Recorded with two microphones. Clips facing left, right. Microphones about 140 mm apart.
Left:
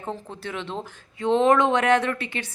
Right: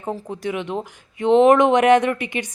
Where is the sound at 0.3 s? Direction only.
15° right (ahead or behind).